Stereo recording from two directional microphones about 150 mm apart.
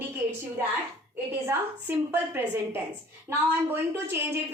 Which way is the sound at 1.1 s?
15° right (ahead or behind).